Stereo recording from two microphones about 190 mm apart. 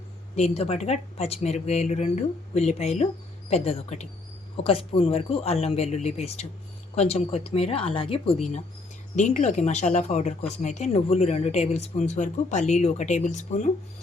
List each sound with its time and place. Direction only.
0.3 s speech: 30° left (ahead or behind)